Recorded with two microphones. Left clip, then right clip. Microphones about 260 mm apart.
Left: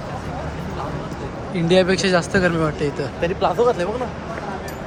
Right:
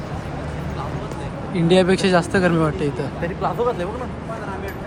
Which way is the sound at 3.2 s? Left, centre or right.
Left.